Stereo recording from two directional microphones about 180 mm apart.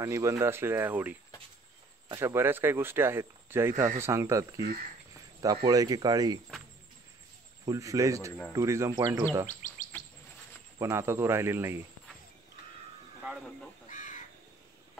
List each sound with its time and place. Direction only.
0.0 s speech: 15° right (ahead or behind)
5.1 s a sound: 20° right (ahead or behind)
5.7 s speech: 20° right (ahead or behind)
7.6 s speech: 20° right (ahead or behind)
9.5 s chirp: 45° left (ahead or behind)
10.8 s speech: 15° right (ahead or behind)
13.8 s crow: 45° left (ahead or behind)